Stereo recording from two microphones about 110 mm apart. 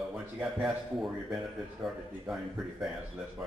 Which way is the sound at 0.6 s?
5° right (ahead or behind).